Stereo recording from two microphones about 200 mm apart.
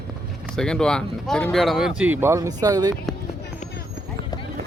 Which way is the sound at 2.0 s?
10° right (ahead or behind).